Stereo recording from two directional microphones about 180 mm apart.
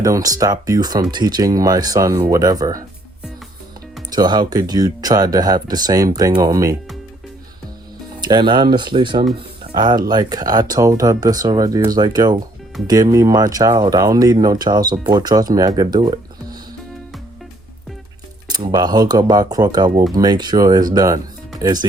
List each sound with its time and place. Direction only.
0.0 s speech: 20° right (ahead or behind)
4.1 s speech: 25° right (ahead or behind)
8.2 s speech: 25° right (ahead or behind)
18.4 s speech: 25° right (ahead or behind)